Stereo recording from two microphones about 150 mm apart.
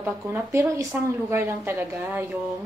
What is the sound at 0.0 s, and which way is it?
A woman's voice, 15° right (ahead or behind).